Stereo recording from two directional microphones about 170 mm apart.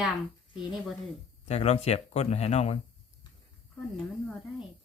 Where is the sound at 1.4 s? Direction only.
40° left (ahead or behind).